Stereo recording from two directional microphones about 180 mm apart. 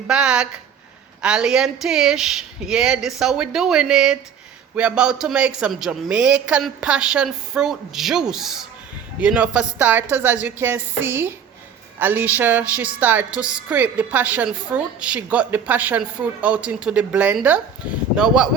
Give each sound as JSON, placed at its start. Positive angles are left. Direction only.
{"t": 0.1, "sound": "a woman's voice", "side_deg": -5}